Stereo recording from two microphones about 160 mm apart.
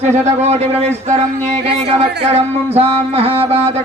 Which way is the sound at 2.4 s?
40° right (ahead or behind).